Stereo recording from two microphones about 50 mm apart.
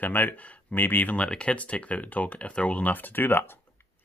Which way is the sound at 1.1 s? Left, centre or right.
Left.